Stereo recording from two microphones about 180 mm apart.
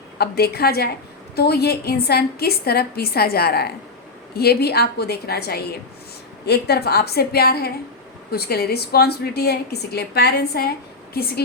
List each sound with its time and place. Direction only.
0.2 s a woman's voice: 60° left (ahead or behind)